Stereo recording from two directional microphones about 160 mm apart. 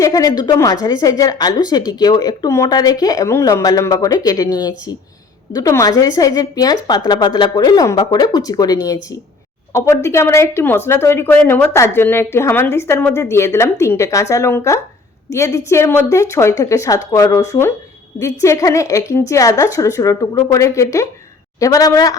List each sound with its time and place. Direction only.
0.0 s speech: 20° left (ahead or behind)
5.5 s speech: 20° left (ahead or behind)